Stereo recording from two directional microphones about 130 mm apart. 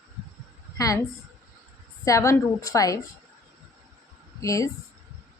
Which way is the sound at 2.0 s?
25° left (ahead or behind).